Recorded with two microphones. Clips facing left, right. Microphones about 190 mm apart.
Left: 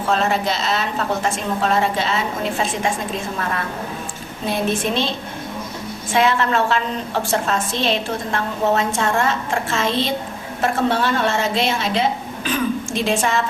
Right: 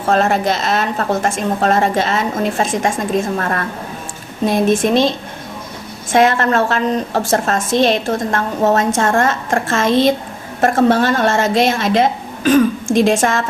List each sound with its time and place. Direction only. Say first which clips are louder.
0.1 s a woman's voice: right 5 dB; 50° right (ahead or behind)